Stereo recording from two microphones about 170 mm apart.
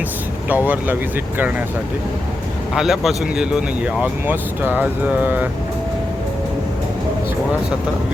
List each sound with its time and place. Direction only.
0.4 s speech: 10° right (ahead or behind)
2.7 s speech: centre (ahead or behind)